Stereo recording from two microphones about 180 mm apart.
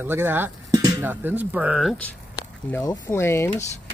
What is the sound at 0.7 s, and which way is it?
Music, 20° right (ahead or behind).